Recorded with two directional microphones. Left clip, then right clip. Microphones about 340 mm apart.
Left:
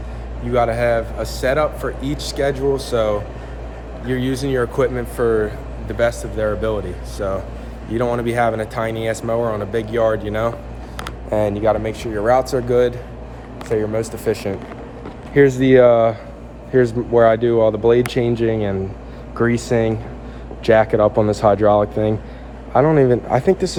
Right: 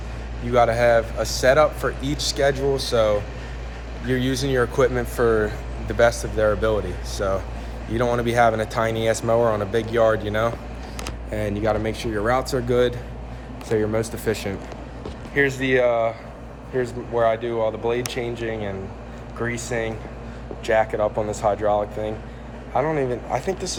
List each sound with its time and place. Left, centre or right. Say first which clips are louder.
0.5 s speech: even; centre
15.4 s speech: left 9 dB; left